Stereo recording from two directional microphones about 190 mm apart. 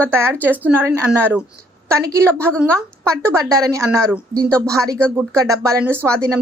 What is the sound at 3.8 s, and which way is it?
Speech, centre (ahead or behind).